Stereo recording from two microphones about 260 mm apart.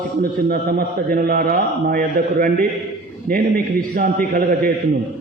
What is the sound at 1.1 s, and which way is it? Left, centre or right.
A man's voice, right.